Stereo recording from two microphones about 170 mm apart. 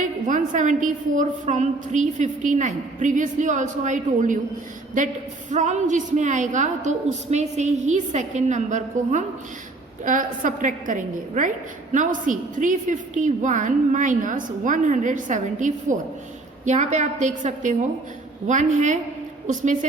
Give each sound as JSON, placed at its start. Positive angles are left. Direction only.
{"t": 0.0, "sound": "a woman's voice", "side_deg": -50}
{"t": 5.5, "sound": "a woman's voice", "side_deg": -45}